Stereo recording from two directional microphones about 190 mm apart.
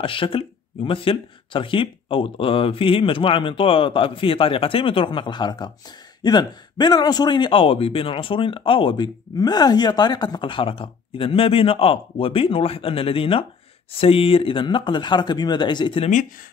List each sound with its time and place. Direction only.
0.0 s a man's voice: 30° left (ahead or behind)